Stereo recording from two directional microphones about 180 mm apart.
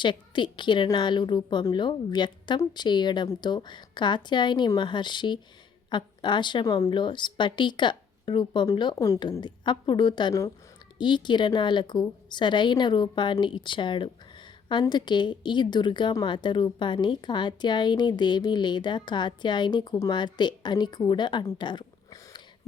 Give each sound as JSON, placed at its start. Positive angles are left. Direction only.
{"t": 0.0, "sound": "a woman's voice", "side_deg": 25}